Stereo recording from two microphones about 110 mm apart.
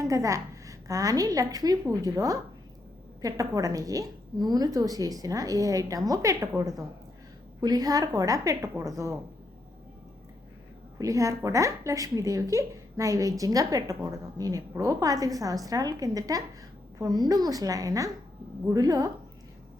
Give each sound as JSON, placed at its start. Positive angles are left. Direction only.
{"t": 0.0, "sound": "a woman's voice", "side_deg": -30}
{"t": 10.9, "sound": "speech", "side_deg": -30}